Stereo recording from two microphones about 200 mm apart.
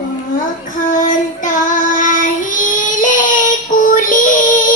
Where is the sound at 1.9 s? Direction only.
40° left (ahead or behind).